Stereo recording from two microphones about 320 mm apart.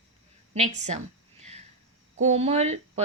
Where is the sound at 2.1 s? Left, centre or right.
Centre.